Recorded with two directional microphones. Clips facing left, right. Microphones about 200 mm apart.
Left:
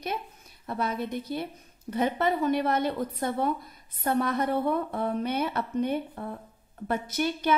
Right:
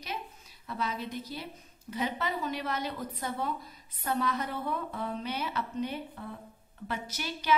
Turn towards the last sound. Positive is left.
turn(degrees=55)  # may be behind; listen again after turning